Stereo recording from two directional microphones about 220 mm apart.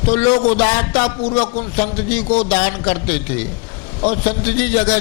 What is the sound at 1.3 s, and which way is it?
Speech, 35° left (ahead or behind).